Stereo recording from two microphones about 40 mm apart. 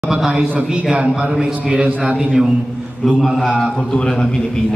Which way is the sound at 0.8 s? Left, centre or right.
Right.